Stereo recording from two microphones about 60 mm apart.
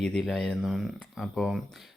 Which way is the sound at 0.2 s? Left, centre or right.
Centre.